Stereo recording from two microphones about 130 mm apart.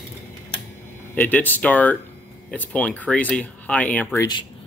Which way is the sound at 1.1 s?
15° left (ahead or behind).